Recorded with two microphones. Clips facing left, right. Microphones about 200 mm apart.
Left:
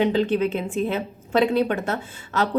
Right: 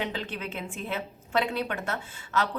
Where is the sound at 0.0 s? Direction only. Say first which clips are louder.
Left 13 dB; 25° left (ahead or behind).